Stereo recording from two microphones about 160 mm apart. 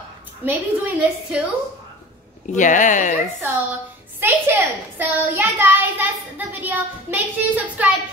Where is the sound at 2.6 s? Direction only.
50° left (ahead or behind).